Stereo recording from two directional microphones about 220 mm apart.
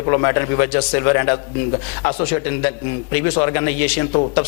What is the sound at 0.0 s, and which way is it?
A man's voice, 20° left (ahead or behind).